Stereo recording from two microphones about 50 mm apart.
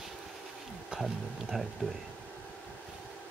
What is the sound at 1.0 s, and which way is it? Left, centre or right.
Speech, centre.